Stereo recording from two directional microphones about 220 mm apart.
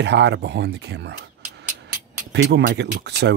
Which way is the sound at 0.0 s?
50° right (ahead or behind).